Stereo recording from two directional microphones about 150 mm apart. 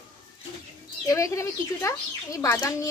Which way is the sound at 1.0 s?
20° left (ahead or behind).